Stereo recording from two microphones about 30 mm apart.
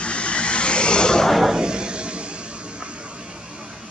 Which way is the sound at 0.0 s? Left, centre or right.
Left.